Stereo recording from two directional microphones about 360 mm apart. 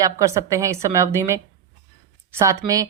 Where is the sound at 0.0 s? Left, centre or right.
Centre.